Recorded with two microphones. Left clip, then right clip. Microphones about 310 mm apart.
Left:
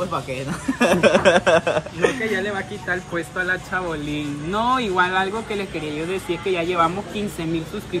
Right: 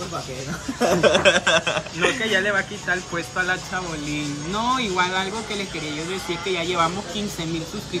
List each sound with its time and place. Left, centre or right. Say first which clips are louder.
0.8 s speech: left 1 dB; left
1.3 s speech: left 3 dB; centre